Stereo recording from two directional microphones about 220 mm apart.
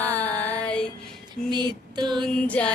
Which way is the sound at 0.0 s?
10° left (ahead or behind).